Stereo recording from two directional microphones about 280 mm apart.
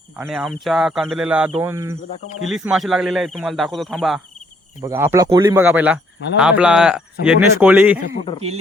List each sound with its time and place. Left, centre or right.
0.2 s speech: centre
8.0 s a man's voice: centre